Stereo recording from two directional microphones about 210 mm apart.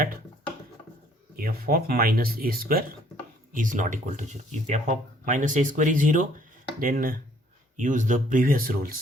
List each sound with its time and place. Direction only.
1.4 s speech: 45° right (ahead or behind)